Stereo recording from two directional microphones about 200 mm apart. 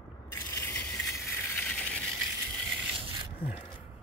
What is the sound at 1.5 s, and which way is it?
Ratchet, 5° left (ahead or behind).